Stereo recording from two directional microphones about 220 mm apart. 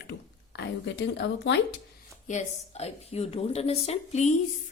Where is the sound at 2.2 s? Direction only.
30° left (ahead or behind).